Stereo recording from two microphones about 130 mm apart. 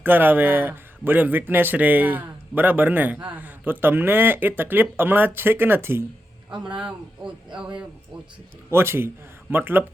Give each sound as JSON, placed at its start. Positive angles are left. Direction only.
{"t": 0.0, "sound": "speech", "side_deg": -15}
{"t": 6.7, "sound": "speech", "side_deg": -5}
{"t": 8.7, "sound": "a man's voice", "side_deg": -20}